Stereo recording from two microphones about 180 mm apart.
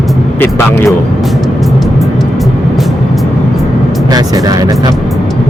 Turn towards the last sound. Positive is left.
turn(degrees=-20)  # may be behind; listen again after turning